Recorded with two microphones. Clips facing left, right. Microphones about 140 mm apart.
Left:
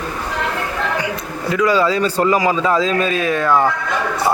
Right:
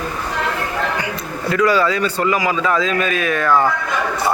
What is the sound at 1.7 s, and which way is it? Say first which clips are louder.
Speech: left 2 dB; 25° left (ahead or behind).